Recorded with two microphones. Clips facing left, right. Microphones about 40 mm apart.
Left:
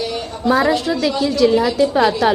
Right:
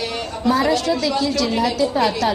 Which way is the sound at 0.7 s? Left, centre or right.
Centre.